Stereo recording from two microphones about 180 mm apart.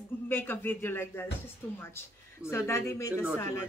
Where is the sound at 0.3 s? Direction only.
10° left (ahead or behind).